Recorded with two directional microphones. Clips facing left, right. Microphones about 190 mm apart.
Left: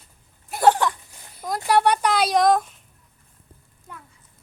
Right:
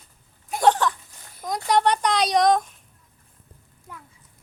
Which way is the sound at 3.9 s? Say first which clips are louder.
Even; 5° right (ahead or behind).